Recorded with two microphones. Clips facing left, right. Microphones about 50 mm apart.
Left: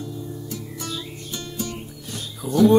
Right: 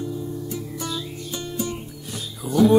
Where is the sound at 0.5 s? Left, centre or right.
Centre.